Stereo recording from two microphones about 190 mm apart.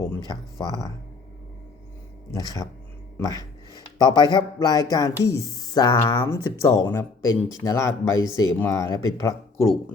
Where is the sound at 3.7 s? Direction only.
20° left (ahead or behind).